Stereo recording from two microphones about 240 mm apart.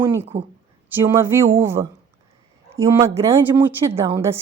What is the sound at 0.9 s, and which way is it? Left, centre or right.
A woman's voice, centre.